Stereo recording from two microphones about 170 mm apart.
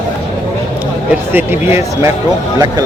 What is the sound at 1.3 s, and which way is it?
Speech, 10° right (ahead or behind).